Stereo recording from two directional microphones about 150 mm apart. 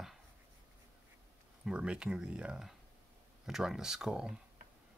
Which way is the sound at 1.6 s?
5° right (ahead or behind).